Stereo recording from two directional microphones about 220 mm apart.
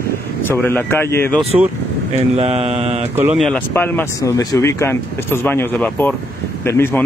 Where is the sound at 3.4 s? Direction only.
5° left (ahead or behind).